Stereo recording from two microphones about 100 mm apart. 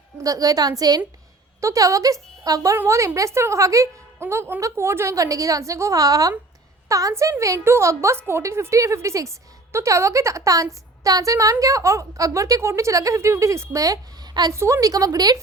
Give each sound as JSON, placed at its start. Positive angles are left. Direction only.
{"t": 0.2, "sound": "a woman's voice", "side_deg": -35}
{"t": 14.5, "sound": "a woman's voice", "side_deg": -30}